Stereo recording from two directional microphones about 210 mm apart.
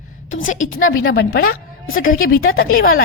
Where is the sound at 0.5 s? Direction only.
40° left (ahead or behind).